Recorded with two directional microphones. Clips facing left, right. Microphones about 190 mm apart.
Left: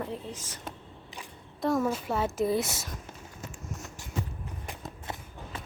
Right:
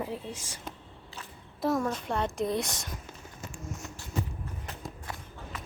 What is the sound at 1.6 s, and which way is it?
A woman's voice, 5° left (ahead or behind).